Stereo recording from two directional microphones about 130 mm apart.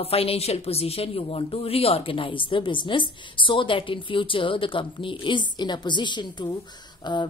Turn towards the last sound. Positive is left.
turn(degrees=35)  # may be behind; listen again after turning